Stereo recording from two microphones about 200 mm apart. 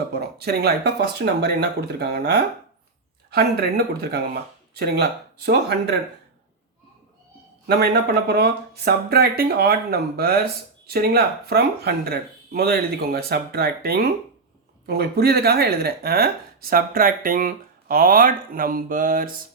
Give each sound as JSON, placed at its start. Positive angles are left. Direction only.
{"t": 0.1, "sound": "speech", "side_deg": -50}
{"t": 7.7, "sound": "speech", "side_deg": -55}